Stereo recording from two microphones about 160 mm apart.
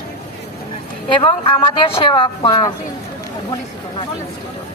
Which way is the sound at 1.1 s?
30° left (ahead or behind).